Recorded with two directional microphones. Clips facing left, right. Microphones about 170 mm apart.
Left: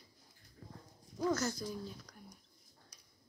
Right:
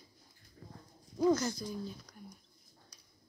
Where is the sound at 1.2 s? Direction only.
15° right (ahead or behind).